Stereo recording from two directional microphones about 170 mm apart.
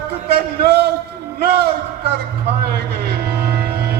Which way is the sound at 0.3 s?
70° right (ahead or behind).